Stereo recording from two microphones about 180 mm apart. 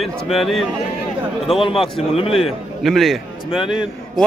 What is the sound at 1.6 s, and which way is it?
Speech, 30° left (ahead or behind).